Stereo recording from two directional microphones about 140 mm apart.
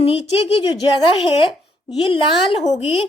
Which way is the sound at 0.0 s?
45° left (ahead or behind).